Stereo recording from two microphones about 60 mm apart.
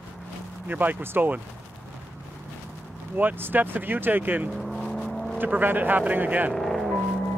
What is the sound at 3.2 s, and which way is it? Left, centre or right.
Speech, right.